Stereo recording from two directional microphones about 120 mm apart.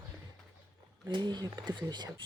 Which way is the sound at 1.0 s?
40° right (ahead or behind).